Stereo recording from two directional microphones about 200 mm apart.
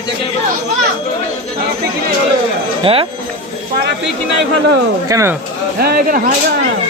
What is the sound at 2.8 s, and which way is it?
Speech, 25° right (ahead or behind).